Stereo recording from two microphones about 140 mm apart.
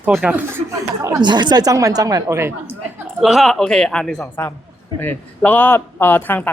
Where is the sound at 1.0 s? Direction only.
30° right (ahead or behind).